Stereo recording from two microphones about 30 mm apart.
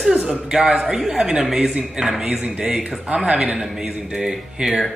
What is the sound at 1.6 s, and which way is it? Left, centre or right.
Speech, right.